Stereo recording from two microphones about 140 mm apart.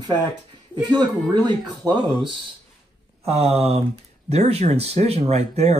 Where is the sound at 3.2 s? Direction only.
45° right (ahead or behind).